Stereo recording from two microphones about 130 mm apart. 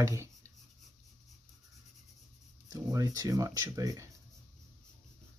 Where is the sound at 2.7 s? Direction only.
25° right (ahead or behind).